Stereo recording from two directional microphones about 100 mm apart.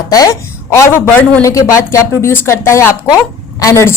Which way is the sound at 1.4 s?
30° left (ahead or behind).